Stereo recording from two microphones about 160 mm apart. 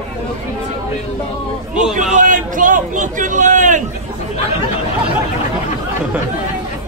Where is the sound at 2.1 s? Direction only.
55° right (ahead or behind).